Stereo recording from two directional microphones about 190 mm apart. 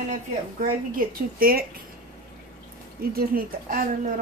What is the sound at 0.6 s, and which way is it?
A woman's voice, 50° right (ahead or behind).